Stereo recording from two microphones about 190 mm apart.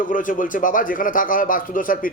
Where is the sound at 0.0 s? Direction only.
45° left (ahead or behind).